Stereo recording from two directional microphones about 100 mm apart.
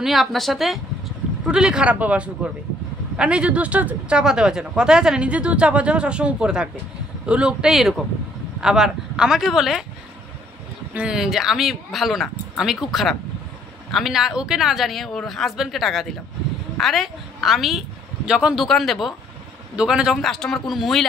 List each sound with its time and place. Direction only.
0.0 s speech: centre (ahead or behind)
11.0 s a woman's voice: 5° right (ahead or behind)
20.2 s speech: 5° left (ahead or behind)